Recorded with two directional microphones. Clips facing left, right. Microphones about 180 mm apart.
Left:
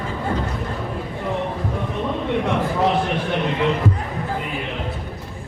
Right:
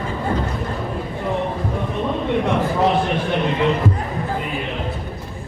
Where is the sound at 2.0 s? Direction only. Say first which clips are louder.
Right 2 dB; 35° right (ahead or behind).